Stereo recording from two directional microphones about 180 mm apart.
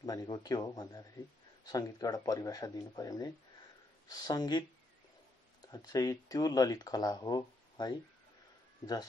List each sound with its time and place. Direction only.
0.0 s speech: 20° left (ahead or behind)